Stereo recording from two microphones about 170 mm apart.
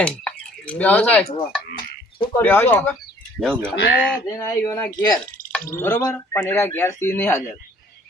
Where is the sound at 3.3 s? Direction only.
Centre (ahead or behind).